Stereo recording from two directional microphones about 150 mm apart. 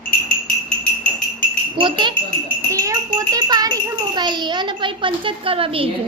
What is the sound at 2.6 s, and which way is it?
A child's voice, 20° right (ahead or behind).